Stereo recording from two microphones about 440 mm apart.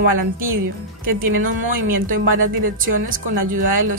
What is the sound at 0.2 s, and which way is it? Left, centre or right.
Speech, right.